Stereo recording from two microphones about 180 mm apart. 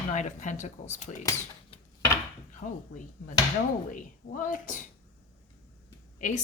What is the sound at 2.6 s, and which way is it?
Speech, 45° left (ahead or behind).